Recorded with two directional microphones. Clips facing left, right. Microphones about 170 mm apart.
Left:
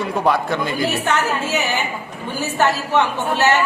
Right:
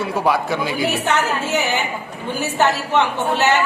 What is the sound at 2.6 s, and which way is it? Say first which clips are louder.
Speech: even; 20° right (ahead or behind).